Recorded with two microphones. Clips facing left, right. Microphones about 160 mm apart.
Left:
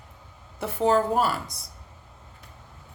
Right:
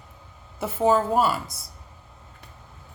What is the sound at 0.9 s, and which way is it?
Speech, 5° right (ahead or behind).